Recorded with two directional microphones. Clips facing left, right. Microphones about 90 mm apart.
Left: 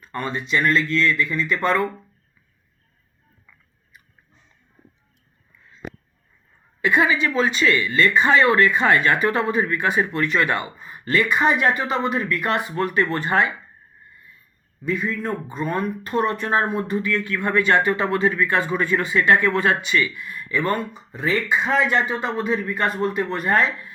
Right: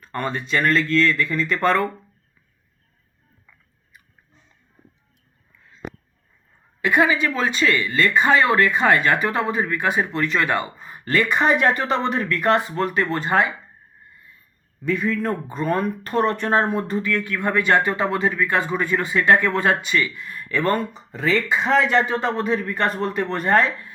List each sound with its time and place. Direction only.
0.1 s speech: 50° right (ahead or behind)
6.8 s a woman's voice: 35° right (ahead or behind)
8.1 s speech: 25° right (ahead or behind)
10.8 s a sound: 35° right (ahead or behind)
11.1 s a woman's voice: 45° right (ahead or behind); by 13.5 s 25° right (ahead or behind)
14.9 s a man's voice: 60° right (ahead or behind)
15.4 s speech: 45° right (ahead or behind)
16.7 s a woman's voice: 35° right (ahead or behind)
17.1 s a woman's voice: 20° right (ahead or behind)
20.3 s speech: 55° right (ahead or behind)
21.1 s a man's voice: 80° right; by 22.5 s 65° right (ahead or behind)
22.7 s a woman's voice: 40° right (ahead or behind)